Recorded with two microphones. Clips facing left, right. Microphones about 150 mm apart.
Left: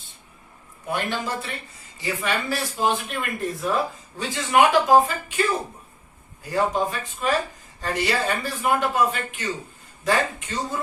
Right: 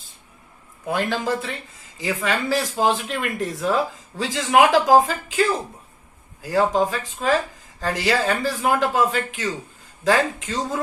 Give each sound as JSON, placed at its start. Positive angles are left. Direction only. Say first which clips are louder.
{"t": 0.9, "sound": "speech", "louder": "right 4 dB", "side_deg": -90}